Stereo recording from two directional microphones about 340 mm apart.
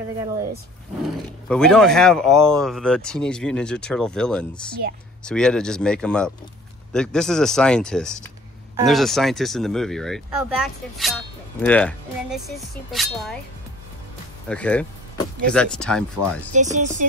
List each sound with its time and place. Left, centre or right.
1.5 s speech: centre
14.5 s speech: centre
16.7 s speech: right